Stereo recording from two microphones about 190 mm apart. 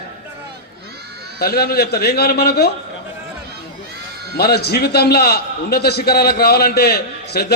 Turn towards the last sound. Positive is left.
turn(degrees=55)  # may be behind; listen again after turning